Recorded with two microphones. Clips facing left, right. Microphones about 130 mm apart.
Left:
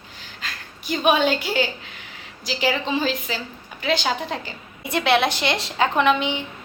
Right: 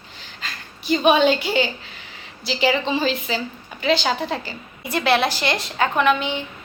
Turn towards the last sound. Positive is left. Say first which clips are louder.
# even
turn(degrees=20)  # may be behind; listen again after turning